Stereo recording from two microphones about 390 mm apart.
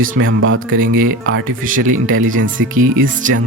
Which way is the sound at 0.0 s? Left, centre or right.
Right.